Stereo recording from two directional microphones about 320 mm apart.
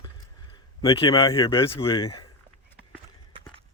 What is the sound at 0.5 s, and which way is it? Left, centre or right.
Speech, centre.